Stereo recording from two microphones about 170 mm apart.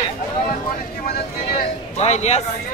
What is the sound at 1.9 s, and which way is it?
Speech, 40° left (ahead or behind).